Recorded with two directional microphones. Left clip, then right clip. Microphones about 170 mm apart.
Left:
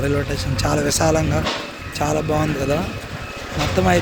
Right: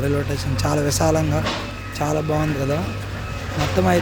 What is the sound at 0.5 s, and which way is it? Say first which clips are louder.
Speech: left 2 dB; 10° right (ahead or behind).